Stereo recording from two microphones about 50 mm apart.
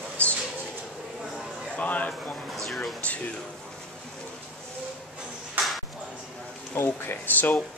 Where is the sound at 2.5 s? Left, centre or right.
Centre.